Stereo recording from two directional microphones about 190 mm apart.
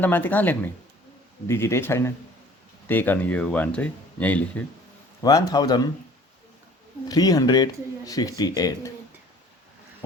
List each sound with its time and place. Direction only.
0.0 s speech: 10° left (ahead or behind)
5.2 s speech: 20° left (ahead or behind)
7.1 s speech: 20° left (ahead or behind)